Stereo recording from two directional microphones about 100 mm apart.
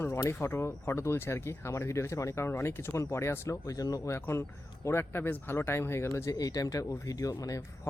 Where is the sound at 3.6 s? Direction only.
35° left (ahead or behind).